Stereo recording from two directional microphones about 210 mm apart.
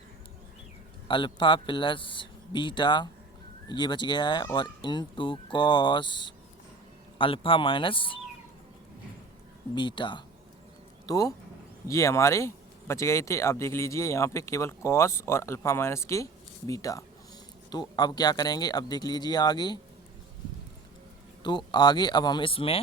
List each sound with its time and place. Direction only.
1.0 s speech: 25° left (ahead or behind)
9.7 s speech: 20° left (ahead or behind)
21.4 s speech: 20° left (ahead or behind)